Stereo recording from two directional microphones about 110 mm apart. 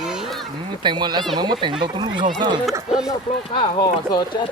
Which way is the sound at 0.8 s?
45° right (ahead or behind).